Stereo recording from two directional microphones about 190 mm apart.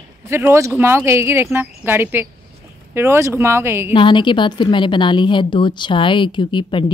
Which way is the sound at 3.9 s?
25° left (ahead or behind).